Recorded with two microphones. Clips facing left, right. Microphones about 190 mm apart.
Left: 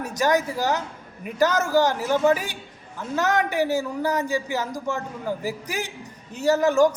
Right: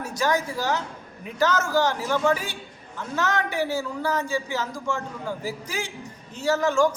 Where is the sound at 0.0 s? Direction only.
15° left (ahead or behind).